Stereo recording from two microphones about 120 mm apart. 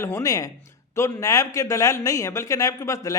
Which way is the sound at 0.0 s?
25° left (ahead or behind).